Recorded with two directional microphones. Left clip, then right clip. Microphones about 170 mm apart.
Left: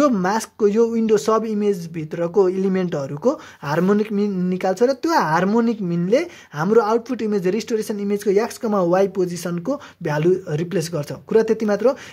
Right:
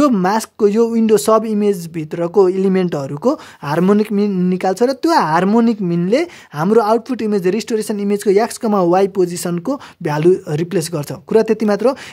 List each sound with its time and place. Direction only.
0.0 s speech: 35° right (ahead or behind)